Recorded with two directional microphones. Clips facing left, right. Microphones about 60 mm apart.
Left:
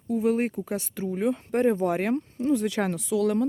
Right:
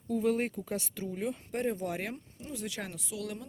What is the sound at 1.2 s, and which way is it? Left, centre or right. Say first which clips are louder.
Speech: left 10 dB; left.